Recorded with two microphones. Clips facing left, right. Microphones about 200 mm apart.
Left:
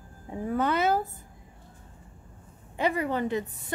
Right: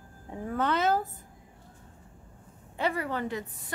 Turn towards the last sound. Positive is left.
turn(degrees=20)  # may be behind; listen again after turning